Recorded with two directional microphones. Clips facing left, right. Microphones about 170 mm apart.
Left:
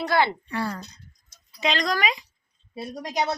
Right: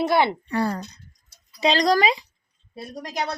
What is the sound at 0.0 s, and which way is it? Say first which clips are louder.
Speech: right 3 dB; 20° right (ahead or behind).